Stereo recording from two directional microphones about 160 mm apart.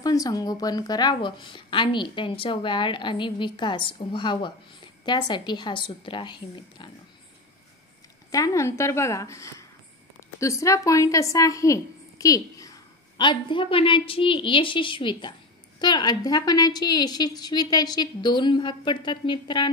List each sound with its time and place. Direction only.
0.0 s speech: 20° left (ahead or behind)
8.3 s speech: 20° left (ahead or behind)